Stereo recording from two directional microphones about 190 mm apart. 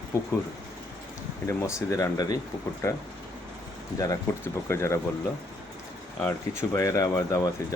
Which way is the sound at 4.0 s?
15° left (ahead or behind).